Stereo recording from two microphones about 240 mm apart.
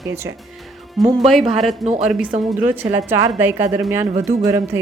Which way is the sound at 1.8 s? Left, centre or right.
Right.